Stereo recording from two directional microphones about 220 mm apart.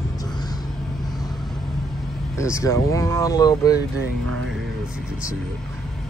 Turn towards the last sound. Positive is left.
turn(degrees=-70)  # may be behind; listen again after turning